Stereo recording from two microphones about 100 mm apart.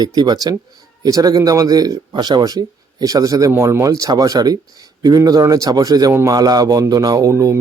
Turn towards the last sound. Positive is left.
turn(degrees=-30)  # may be behind; listen again after turning